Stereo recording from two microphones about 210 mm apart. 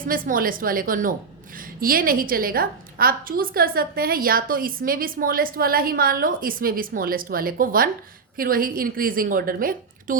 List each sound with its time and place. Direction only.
0.0 s a woman's voice: 40° right (ahead or behind)